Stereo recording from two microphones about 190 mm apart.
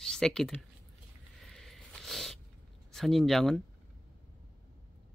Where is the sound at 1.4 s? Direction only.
Centre (ahead or behind).